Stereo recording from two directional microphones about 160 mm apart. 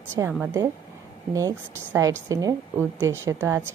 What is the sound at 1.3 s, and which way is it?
A woman's voice, 20° right (ahead or behind).